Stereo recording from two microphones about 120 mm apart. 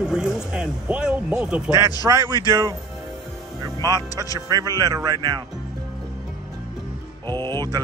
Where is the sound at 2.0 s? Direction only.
30° right (ahead or behind).